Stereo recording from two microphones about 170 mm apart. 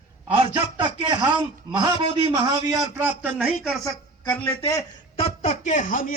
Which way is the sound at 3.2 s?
5° right (ahead or behind).